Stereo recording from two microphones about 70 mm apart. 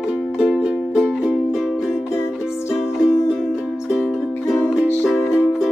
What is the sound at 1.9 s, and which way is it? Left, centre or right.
Music, left.